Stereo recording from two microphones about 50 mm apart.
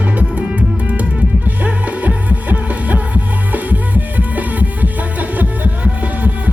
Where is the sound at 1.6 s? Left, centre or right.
Right.